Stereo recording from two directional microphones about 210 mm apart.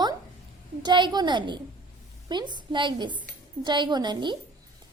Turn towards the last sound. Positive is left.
turn(degrees=-20)  # may be behind; listen again after turning